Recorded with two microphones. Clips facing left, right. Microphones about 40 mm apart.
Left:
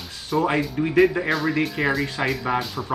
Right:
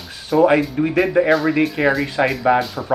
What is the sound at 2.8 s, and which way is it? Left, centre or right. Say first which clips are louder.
Speech: right 6 dB; centre.